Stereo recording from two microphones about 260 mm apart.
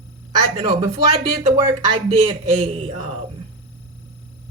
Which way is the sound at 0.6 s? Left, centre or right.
Centre.